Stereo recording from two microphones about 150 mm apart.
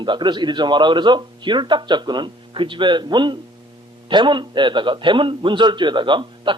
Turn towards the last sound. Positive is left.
turn(degrees=-30)  # may be behind; listen again after turning